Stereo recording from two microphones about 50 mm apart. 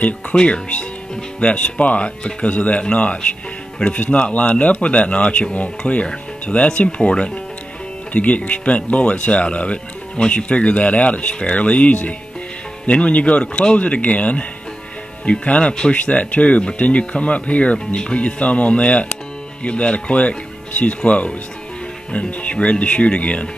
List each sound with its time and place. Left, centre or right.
0.0 s speech: left